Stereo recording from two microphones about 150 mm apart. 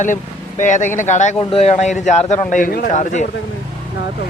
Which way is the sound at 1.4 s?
40° left (ahead or behind).